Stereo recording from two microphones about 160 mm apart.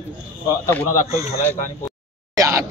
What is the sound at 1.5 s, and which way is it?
Speech, 15° left (ahead or behind).